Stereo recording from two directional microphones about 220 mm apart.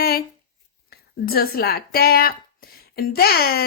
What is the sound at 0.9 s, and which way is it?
Speech, 45° left (ahead or behind).